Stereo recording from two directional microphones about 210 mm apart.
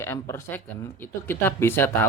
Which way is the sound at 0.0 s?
10° left (ahead or behind).